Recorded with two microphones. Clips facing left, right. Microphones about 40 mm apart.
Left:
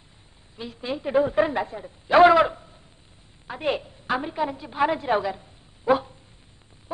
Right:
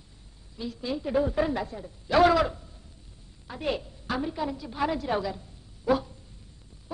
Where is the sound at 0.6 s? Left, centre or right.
Left.